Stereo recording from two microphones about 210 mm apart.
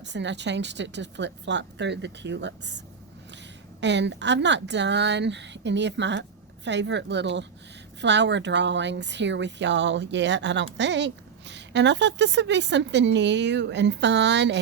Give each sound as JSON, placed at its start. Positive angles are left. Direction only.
{"t": 0.0, "sound": "speech", "side_deg": -55}